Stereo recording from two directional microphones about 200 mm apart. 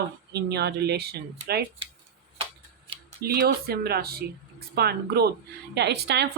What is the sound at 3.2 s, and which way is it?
Speech, 50° right (ahead or behind).